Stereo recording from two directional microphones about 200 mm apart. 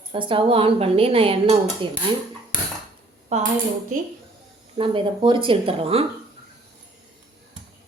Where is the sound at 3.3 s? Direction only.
35° right (ahead or behind).